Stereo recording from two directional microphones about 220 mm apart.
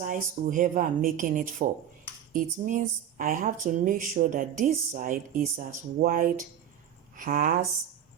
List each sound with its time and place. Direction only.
0.0 s speech: 35° right (ahead or behind)